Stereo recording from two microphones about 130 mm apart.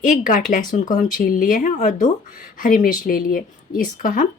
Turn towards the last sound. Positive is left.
turn(degrees=90)